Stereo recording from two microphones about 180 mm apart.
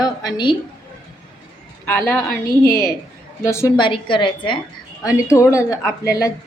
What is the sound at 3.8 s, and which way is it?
Speech, 30° left (ahead or behind).